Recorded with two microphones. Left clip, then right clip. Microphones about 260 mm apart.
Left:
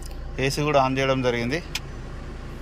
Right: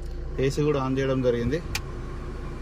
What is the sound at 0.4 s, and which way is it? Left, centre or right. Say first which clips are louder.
Speech: left 4 dB; centre.